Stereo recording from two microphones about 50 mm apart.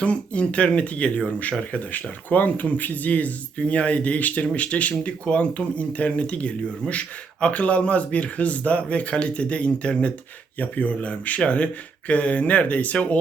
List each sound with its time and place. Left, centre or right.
0.0 s speech: left